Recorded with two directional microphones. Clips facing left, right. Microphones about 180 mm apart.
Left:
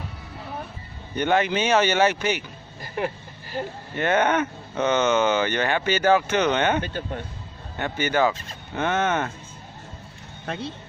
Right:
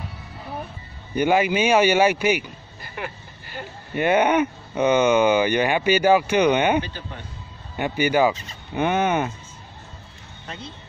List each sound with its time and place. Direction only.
1.1 s speech: 10° right (ahead or behind)
3.0 s speech: 35° left (ahead or behind)
3.9 s speech: 10° right (ahead or behind)
6.8 s speech: 50° left (ahead or behind)
7.7 s speech: 10° right (ahead or behind)
10.5 s speech: 55° left (ahead or behind)